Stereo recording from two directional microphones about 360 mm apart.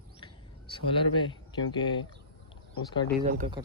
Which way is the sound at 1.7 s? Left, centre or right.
Centre.